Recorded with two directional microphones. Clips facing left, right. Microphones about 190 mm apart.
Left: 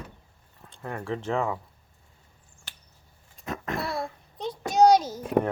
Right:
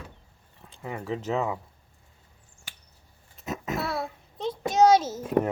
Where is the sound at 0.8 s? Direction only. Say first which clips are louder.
Even; 5° right (ahead or behind).